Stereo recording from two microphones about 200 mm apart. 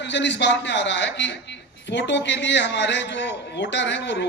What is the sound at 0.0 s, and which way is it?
A man's voice, 60° left (ahead or behind).